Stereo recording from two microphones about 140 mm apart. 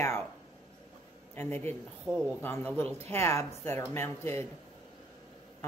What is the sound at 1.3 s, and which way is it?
Speech, 15° left (ahead or behind).